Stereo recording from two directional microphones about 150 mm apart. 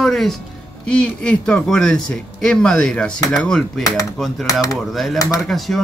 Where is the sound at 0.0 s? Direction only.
Centre (ahead or behind).